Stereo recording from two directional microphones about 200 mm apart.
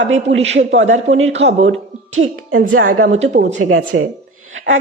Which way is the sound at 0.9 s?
35° right (ahead or behind).